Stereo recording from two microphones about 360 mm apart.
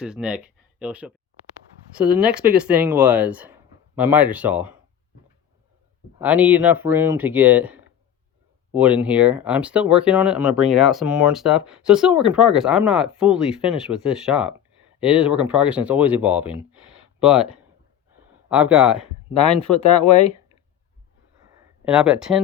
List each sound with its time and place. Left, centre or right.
0.0 s speech: centre
6.1 s speech: centre
20.0 s speech: centre
21.8 s speech: centre